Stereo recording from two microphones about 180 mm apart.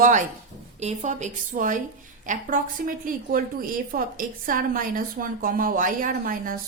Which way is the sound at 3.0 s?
50° right (ahead or behind).